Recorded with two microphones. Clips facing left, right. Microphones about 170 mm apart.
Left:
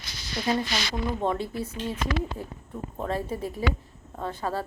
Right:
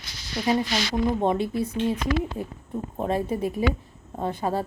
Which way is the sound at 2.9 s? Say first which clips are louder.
Right 4 dB; 20° right (ahead or behind).